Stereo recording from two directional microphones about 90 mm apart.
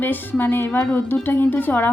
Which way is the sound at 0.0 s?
20° left (ahead or behind).